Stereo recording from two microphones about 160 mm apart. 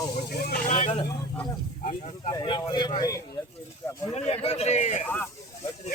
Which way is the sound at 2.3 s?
30° left (ahead or behind).